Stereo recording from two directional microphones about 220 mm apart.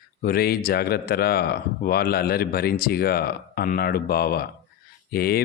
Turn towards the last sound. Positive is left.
turn(degrees=45)  # may be behind; listen again after turning